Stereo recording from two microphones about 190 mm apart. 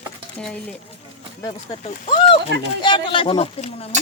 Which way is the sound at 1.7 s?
35° left (ahead or behind).